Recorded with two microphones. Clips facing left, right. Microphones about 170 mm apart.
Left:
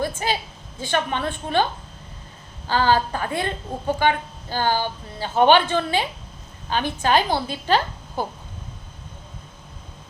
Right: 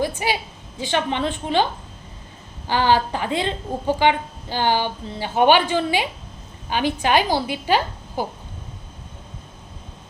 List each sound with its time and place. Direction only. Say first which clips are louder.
0.2 s a woman's voice: right 1 dB; 10° right (ahead or behind)
2.6 s a woman's voice: right 1 dB; 15° right (ahead or behind)